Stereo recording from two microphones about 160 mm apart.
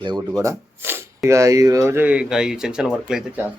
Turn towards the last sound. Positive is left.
turn(degrees=-5)  # may be behind; listen again after turning